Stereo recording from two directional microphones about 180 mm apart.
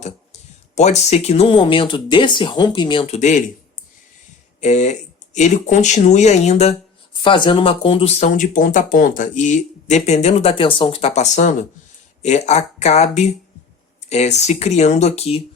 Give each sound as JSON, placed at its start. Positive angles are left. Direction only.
{"t": 0.8, "sound": "speech", "side_deg": 40}
{"t": 4.6, "sound": "speech", "side_deg": 40}
{"t": 7.2, "sound": "speech", "side_deg": 25}